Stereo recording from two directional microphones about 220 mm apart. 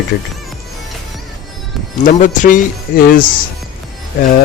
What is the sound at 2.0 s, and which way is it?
Speech, 35° left (ahead or behind).